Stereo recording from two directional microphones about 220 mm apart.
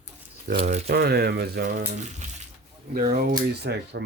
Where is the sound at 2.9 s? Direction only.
40° right (ahead or behind).